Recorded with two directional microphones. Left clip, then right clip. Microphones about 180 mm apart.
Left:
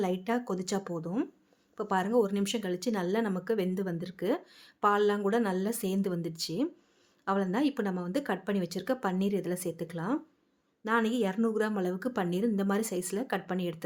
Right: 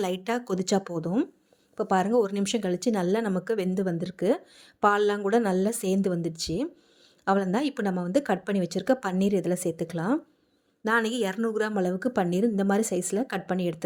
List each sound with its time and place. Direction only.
0.0 s speech: 40° right (ahead or behind)